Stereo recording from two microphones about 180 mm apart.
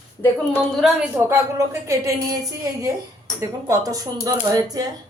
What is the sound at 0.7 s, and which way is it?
Speech, 5° right (ahead or behind).